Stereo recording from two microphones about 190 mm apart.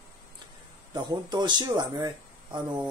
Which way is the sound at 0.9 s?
20° right (ahead or behind).